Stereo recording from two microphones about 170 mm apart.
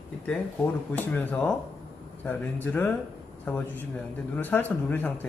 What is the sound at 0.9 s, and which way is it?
Speech, 10° left (ahead or behind).